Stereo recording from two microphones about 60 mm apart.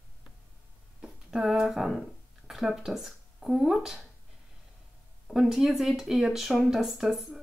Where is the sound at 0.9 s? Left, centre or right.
Centre.